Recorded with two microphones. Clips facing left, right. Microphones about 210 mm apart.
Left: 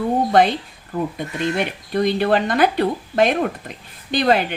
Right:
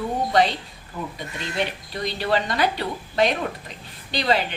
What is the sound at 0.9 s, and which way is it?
Speech, 55° left (ahead or behind).